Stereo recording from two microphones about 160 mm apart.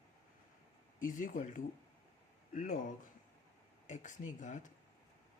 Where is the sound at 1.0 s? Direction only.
55° left (ahead or behind).